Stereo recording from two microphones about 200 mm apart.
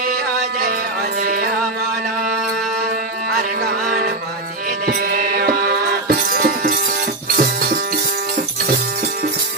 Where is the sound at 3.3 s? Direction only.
45° right (ahead or behind).